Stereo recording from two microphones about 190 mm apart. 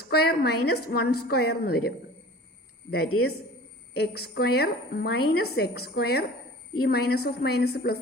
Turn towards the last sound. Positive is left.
turn(degrees=55)  # may be behind; listen again after turning